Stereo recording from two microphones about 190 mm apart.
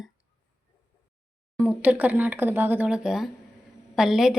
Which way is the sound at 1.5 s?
10° right (ahead or behind).